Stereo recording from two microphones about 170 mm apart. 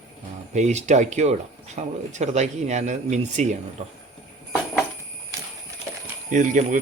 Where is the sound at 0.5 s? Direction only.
40° right (ahead or behind).